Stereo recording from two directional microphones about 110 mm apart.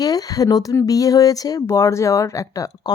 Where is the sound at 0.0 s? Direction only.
35° left (ahead or behind).